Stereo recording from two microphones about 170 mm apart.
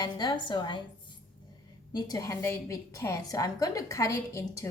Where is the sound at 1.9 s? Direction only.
20° left (ahead or behind).